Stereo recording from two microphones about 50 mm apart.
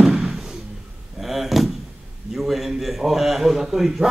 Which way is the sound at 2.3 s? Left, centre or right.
Centre.